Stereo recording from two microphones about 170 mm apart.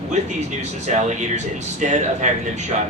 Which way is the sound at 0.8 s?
45° right (ahead or behind).